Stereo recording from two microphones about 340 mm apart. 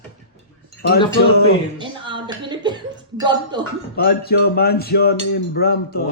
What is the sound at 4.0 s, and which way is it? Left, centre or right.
Speech, left.